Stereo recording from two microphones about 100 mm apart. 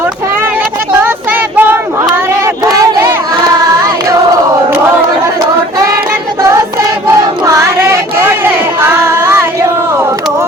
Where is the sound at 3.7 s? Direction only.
35° right (ahead or behind).